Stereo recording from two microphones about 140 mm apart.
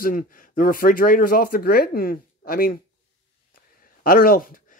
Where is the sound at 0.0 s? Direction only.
80° left.